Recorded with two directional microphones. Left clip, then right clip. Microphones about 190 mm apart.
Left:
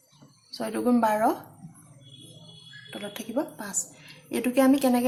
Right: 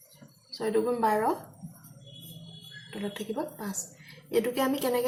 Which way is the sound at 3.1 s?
45° left (ahead or behind).